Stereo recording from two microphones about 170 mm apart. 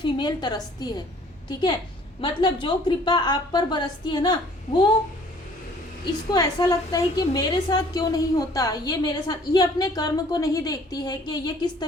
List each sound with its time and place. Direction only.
0.0 s a woman's voice: 25° left (ahead or behind)
6.3 s a woman's voice: 20° left (ahead or behind)